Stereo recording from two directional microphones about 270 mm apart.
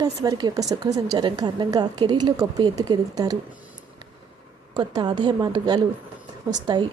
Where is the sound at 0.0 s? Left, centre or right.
Centre.